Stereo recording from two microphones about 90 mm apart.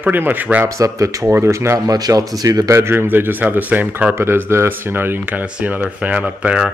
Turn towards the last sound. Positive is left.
turn(degrees=-15)  # may be behind; listen again after turning